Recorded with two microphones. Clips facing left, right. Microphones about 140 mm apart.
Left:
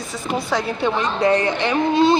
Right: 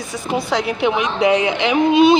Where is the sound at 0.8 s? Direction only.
15° right (ahead or behind).